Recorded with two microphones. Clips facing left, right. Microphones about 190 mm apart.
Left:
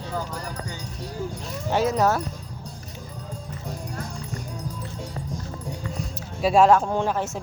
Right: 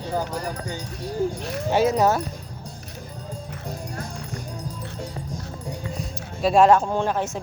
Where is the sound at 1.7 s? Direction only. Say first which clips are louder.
Right 2 dB; 5° right (ahead or behind).